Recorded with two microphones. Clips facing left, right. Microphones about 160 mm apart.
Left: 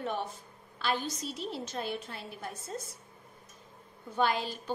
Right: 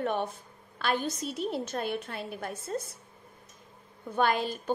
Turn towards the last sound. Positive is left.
turn(degrees=-50)  # may be behind; listen again after turning